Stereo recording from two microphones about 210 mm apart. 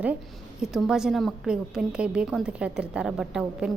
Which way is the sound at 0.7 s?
5° right (ahead or behind).